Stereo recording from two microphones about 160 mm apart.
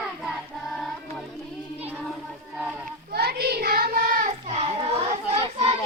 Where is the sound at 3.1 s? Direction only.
80° right; by 4.2 s 60° right (ahead or behind).